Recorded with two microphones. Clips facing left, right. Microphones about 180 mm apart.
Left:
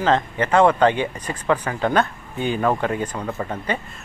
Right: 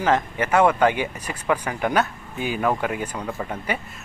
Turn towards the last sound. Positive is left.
turn(degrees=-10)  # may be behind; listen again after turning